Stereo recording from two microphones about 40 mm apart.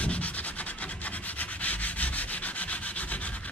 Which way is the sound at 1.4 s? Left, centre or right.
Left.